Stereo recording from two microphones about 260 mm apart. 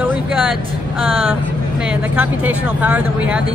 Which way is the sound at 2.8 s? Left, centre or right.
Centre.